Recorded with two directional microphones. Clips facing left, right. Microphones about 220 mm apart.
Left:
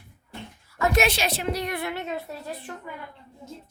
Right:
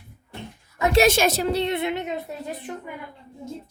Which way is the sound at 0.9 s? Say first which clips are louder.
Right 9 dB; 45° right (ahead or behind).